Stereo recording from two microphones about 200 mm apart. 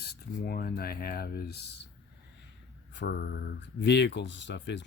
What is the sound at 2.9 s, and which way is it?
Speech, 55° left (ahead or behind).